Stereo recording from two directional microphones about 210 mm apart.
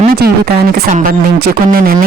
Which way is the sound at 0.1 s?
45° right (ahead or behind).